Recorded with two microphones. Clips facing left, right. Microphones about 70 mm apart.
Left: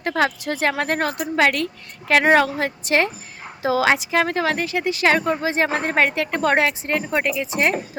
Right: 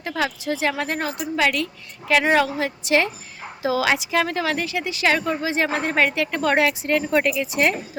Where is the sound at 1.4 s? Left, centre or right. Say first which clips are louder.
Left 3 dB; left.